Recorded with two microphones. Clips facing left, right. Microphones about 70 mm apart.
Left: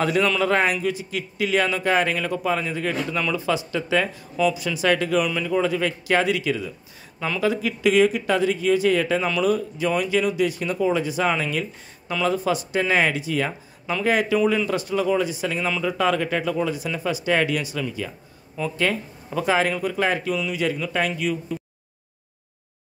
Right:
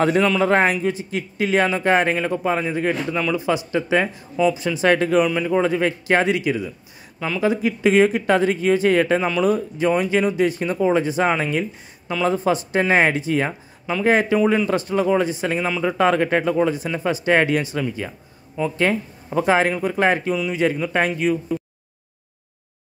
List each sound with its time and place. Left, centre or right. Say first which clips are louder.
0.0 s a man's voice: right 3 dB; right
7.2 s speech: right 2 dB; centre
7.4 s speech: right 3 dB; right
9.2 s speech: right 2 dB; right